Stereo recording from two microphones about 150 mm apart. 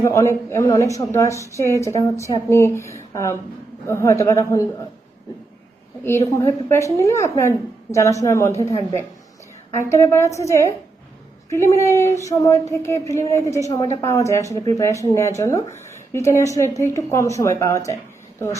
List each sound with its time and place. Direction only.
0.0 s a woman's voice: 20° left (ahead or behind)
6.1 s a woman's voice: 15° left (ahead or behind)
9.9 s a woman's voice: 20° left (ahead or behind)